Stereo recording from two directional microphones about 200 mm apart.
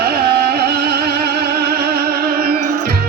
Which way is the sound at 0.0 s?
50° right (ahead or behind).